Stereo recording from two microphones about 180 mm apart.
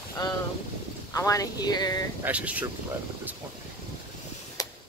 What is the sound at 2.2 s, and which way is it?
Speech, 10° right (ahead or behind).